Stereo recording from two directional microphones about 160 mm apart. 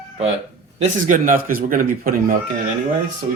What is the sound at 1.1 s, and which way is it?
Speech, 60° right (ahead or behind).